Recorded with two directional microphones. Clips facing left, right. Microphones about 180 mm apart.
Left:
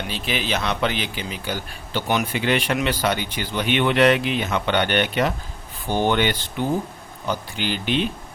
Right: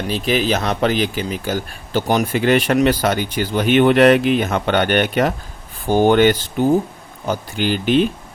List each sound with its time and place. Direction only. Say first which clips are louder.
0.1 s speech: right 9 dB; 40° right (ahead or behind)